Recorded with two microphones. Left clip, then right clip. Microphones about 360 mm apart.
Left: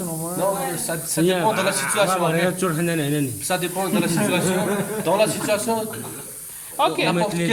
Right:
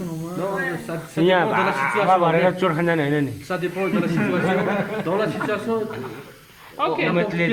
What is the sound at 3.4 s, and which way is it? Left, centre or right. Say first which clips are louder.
Speech: left 1 dB; left.